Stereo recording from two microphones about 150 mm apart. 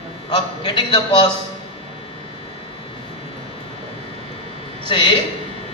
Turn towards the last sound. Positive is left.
turn(degrees=30)  # may be behind; listen again after turning